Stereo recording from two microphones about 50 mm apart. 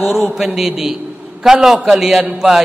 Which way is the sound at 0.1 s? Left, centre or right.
Centre.